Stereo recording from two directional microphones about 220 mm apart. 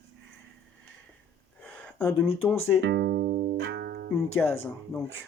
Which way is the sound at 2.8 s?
50° right (ahead or behind).